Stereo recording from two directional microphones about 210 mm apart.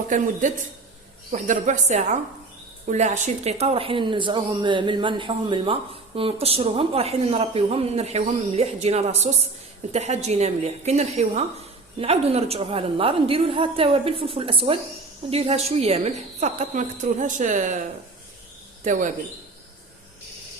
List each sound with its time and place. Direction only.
0.1 s speech: 40° right (ahead or behind)
1.3 s speech: 35° right (ahead or behind)
18.9 s speech: 35° right (ahead or behind)